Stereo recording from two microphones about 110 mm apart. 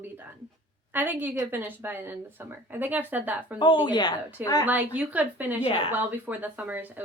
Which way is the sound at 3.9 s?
40° left (ahead or behind).